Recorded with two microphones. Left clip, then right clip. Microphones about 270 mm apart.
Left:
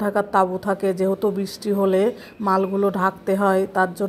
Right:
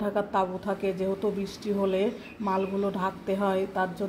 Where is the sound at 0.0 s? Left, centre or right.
Left.